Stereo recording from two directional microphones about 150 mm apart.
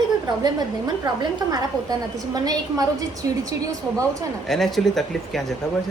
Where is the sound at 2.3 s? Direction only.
25° right (ahead or behind).